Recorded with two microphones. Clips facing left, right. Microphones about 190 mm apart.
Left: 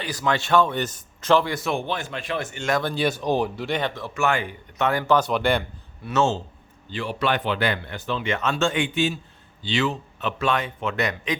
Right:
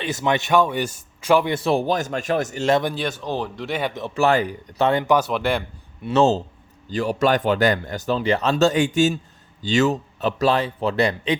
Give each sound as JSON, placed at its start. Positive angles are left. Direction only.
{"t": 0.0, "sound": "speech", "side_deg": -25}
{"t": 1.5, "sound": "speech", "side_deg": -30}
{"t": 2.9, "sound": "speech", "side_deg": 5}
{"t": 3.2, "sound": "speech", "side_deg": 15}
{"t": 4.1, "sound": "speech", "side_deg": -35}
{"t": 4.9, "sound": "speech", "side_deg": -25}
{"t": 5.1, "sound": "speech", "side_deg": -5}
{"t": 6.1, "sound": "speech", "side_deg": -35}